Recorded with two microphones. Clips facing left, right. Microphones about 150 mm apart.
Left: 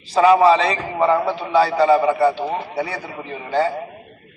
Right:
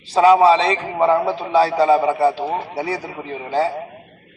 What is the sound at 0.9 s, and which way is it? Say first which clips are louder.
Speech: right 1 dB; 10° right (ahead or behind).